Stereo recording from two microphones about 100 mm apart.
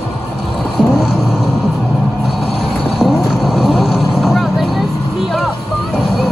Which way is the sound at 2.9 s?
5° right (ahead or behind).